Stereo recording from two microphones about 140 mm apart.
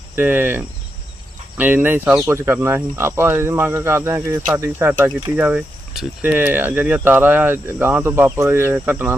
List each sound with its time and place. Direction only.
0.2 s speech: 15° right (ahead or behind)